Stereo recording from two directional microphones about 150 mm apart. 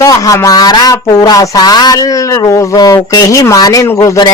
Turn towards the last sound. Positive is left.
turn(degrees=25)  # may be behind; listen again after turning